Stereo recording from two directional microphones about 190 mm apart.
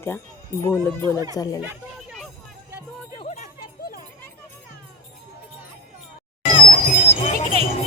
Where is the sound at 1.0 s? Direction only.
20° right (ahead or behind).